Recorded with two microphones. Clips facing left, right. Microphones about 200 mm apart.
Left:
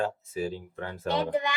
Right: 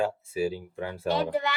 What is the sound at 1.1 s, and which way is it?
Speech, 20° left (ahead or behind).